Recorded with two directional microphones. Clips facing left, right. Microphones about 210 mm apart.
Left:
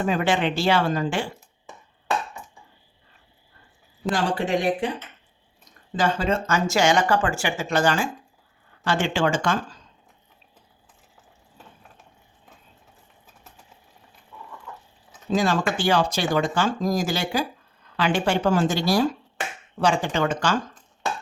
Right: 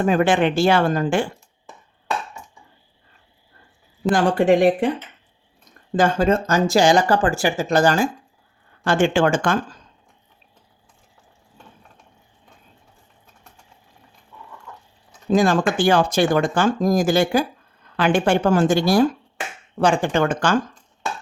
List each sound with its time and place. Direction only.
0.0 s speech: 50° right (ahead or behind)
4.1 s speech: 50° right (ahead or behind)
6.0 s speech: 45° right (ahead or behind)
15.3 s speech: 50° right (ahead or behind)